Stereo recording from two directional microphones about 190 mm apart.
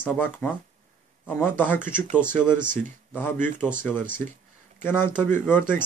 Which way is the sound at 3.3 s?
40° right (ahead or behind).